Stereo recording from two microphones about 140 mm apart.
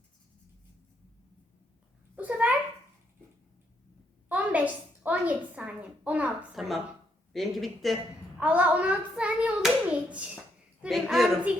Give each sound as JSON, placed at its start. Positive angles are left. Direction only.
{"t": 2.1, "sound": "a sound", "side_deg": -10}
{"t": 4.3, "sound": "a woman's voice", "side_deg": -10}
{"t": 8.4, "sound": "a child's voice", "side_deg": -10}